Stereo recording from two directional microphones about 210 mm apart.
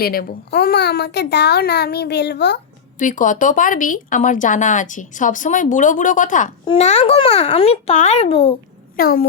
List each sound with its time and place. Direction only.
0.0 s a child's voice: 45° left (ahead or behind)
3.0 s a child's voice: 40° left (ahead or behind)
9.0 s speech: 45° left (ahead or behind)